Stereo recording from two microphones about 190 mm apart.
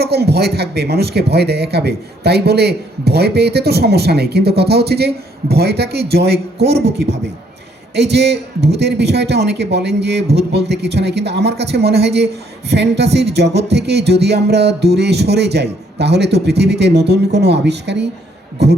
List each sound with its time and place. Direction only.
0.0 s speech: 60° right (ahead or behind)
7.9 s speech: 60° right (ahead or behind)